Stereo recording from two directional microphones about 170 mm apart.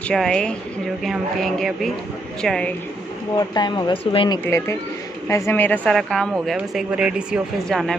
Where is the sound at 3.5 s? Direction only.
25° left (ahead or behind).